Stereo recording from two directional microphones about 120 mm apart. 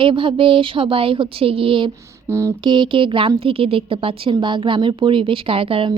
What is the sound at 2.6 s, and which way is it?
A woman's voice, 40° right (ahead or behind).